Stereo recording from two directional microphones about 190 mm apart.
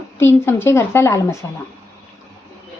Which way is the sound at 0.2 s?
15° left (ahead or behind).